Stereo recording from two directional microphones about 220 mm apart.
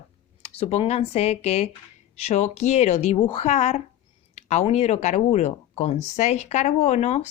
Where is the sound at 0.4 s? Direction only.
30° left (ahead or behind).